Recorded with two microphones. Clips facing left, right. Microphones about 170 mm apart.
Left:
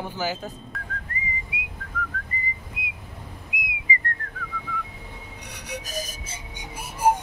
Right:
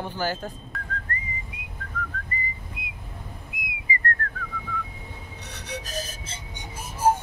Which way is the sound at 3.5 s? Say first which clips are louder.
Left 8 dB; 15° left (ahead or behind).